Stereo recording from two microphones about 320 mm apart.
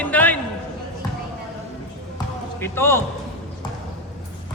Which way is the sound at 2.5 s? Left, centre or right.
Centre.